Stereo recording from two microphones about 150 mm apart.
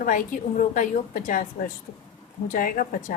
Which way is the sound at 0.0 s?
65° left (ahead or behind).